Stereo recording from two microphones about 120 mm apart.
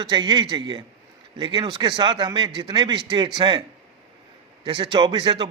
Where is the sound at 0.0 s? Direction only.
40° right (ahead or behind).